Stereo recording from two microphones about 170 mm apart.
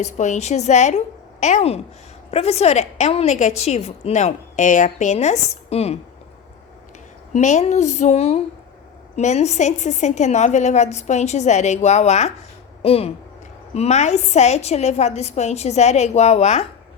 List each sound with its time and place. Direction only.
0.0 s a woman's voice: 45° left (ahead or behind)
7.3 s a woman's voice: 40° left (ahead or behind)